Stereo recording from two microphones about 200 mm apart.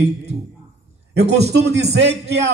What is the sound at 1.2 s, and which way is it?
Speech, 35° right (ahead or behind).